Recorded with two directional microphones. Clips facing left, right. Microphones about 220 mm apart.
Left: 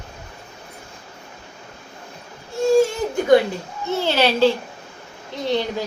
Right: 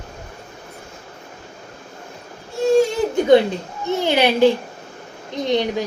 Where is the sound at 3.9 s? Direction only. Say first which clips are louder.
Right 2 dB; 15° right (ahead or behind).